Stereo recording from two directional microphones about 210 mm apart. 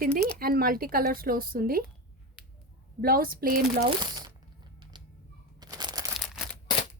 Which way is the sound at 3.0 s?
45° right (ahead or behind).